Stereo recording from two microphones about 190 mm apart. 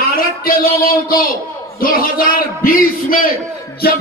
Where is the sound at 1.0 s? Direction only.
50° left (ahead or behind).